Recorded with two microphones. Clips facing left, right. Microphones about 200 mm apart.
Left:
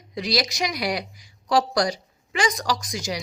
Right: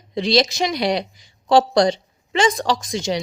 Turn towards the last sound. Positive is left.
turn(degrees=-25)  # may be behind; listen again after turning